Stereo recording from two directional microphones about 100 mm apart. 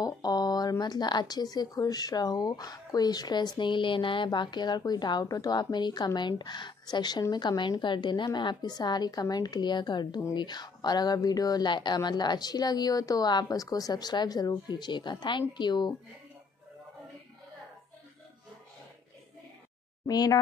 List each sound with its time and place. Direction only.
0.0 s a woman's voice: 40° left (ahead or behind)
20.1 s speech: 40° left (ahead or behind)